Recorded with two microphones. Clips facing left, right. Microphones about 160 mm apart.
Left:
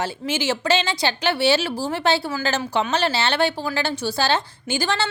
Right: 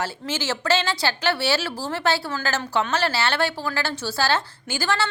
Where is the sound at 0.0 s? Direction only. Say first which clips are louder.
Left 3 dB; 15° left (ahead or behind).